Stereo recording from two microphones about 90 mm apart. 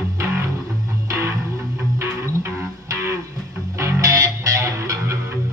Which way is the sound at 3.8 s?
35° right (ahead or behind).